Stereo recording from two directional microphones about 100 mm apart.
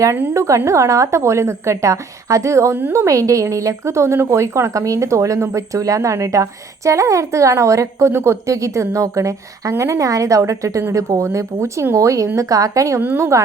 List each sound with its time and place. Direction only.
0.3 s a woman's voice: 30° right (ahead or behind)
13.0 s a woman's voice: 20° right (ahead or behind)